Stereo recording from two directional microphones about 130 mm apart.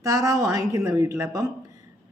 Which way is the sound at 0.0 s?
25° right (ahead or behind).